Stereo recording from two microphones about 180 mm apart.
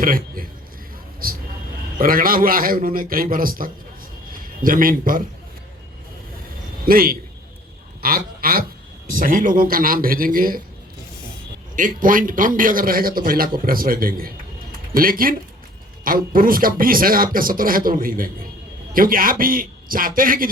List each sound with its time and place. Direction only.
0.0 s a man's voice: 50° right (ahead or behind)
6.8 s a man's voice: 55° right (ahead or behind)
11.8 s a man's voice: 50° right (ahead or behind)